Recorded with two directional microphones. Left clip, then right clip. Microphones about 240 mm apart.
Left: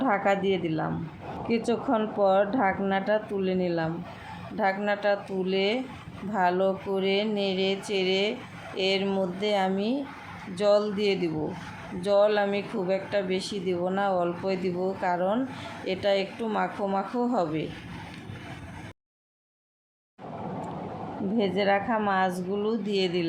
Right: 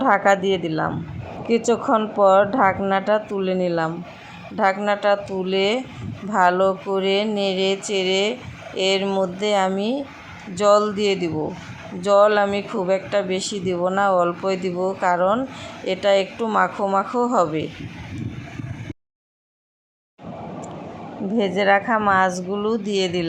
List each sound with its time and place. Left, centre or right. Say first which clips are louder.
0.0 s speech: right 8 dB; centre
21.3 s a woman's voice: right 7 dB; centre